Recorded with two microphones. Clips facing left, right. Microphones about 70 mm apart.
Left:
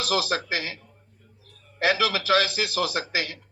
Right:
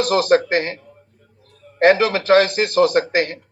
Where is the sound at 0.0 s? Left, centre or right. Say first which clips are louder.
Right 10 dB; right.